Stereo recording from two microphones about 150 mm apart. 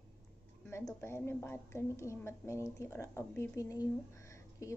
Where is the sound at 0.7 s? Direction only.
15° left (ahead or behind).